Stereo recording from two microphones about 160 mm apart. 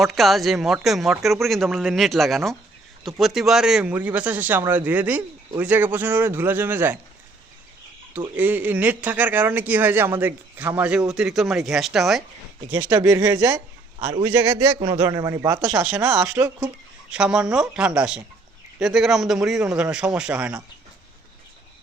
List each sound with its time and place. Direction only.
0.0 s speech: centre (ahead or behind)
8.4 s speech: 10° right (ahead or behind)
12.7 s a man's voice: 20° right (ahead or behind)
15.6 s speech: 5° right (ahead or behind)
16.0 s a man's voice: 20° right (ahead or behind)
17.1 s speech: 5° right (ahead or behind)